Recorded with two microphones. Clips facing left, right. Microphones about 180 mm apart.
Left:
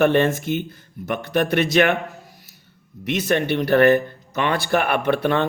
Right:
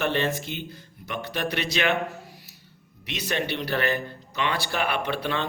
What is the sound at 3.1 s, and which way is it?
Speech, 50° left (ahead or behind).